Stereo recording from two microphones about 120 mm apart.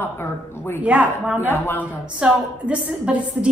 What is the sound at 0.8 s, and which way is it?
Speech, 10° right (ahead or behind).